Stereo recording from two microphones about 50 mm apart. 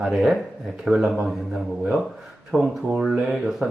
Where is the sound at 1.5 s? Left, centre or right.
Centre.